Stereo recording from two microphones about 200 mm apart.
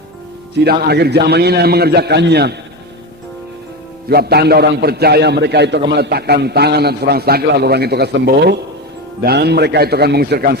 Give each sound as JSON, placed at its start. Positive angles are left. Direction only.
{"t": 0.6, "sound": "a man's voice", "side_deg": -50}
{"t": 4.1, "sound": "a man's voice", "side_deg": -50}